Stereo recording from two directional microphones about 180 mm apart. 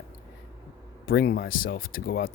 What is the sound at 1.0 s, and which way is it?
Speech, 60° left (ahead or behind).